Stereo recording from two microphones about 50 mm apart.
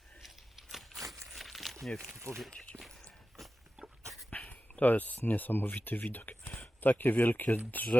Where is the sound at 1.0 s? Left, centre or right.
Right.